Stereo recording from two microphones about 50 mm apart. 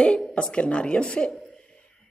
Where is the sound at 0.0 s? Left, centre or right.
Left.